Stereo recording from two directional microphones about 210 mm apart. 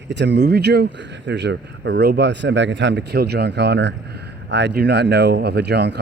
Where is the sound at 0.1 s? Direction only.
55° right (ahead or behind).